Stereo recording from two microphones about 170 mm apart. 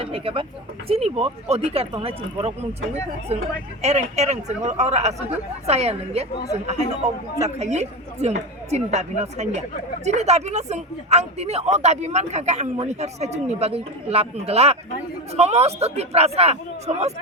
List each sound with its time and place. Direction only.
0.0 s speech: 30° right (ahead or behind)